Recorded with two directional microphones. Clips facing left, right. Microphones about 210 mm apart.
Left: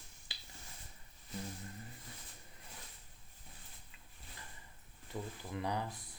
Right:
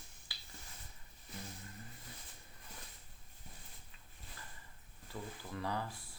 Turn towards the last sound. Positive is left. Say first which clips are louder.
# left 2 dB
turn(degrees=20)  # may be behind; listen again after turning